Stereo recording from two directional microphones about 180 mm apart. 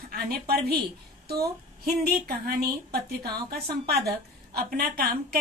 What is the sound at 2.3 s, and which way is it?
A woman's voice, 55° right (ahead or behind).